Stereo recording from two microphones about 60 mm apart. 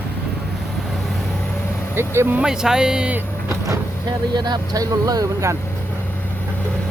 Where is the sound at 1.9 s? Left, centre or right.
Right.